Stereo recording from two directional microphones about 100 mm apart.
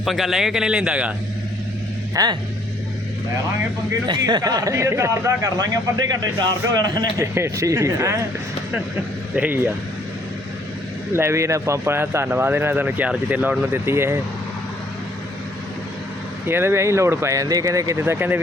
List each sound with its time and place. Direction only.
0.0 s a man's voice: centre (ahead or behind)
2.1 s speech: 45° right (ahead or behind)
4.0 s a man's voice: 50° right (ahead or behind); by 5.5 s 30° right (ahead or behind)
5.5 s a man's voice: 45° right (ahead or behind)
7.2 s speech: 30° right (ahead or behind)
9.3 s speech: 15° right (ahead or behind)
11.1 s speech: 25° right (ahead or behind)
16.5 s speech: 25° right (ahead or behind)
18.0 s speech: 20° right (ahead or behind)